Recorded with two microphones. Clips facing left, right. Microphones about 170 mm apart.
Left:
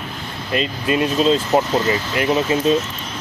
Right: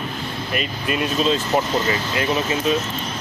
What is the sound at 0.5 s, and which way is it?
Speech, 25° left (ahead or behind).